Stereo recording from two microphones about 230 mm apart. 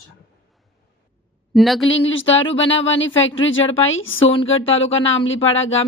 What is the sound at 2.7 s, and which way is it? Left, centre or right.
Speech, left.